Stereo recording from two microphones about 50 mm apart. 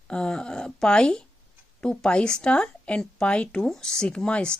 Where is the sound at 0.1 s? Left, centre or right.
Centre.